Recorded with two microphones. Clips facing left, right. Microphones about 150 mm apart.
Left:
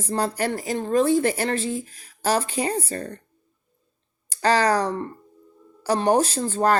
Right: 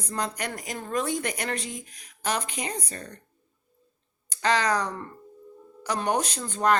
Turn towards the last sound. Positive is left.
turn(degrees=35)  # may be behind; listen again after turning